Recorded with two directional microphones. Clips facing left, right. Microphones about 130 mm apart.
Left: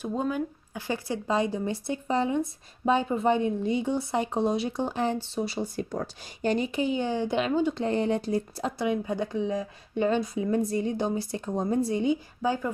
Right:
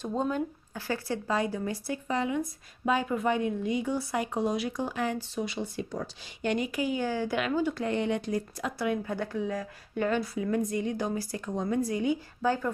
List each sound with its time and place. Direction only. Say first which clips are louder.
0.0 s speech: left 1 dB; 5° left (ahead or behind)
0.7 s speech: left 1 dB; 15° left (ahead or behind); by 6.0 s 45° left (ahead or behind)
6.4 s speech: left 3 dB; 30° left (ahead or behind)
12.4 s speech: even; 15° left (ahead or behind)